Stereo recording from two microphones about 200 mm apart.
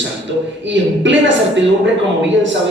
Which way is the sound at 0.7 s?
65° right (ahead or behind).